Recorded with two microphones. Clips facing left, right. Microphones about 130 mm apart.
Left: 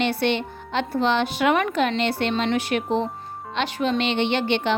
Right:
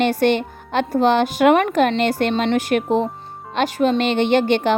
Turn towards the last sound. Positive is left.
turn(degrees=-45)  # may be behind; listen again after turning